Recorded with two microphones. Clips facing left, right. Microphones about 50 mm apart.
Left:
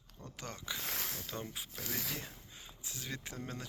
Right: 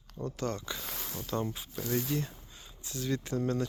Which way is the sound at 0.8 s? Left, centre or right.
Left.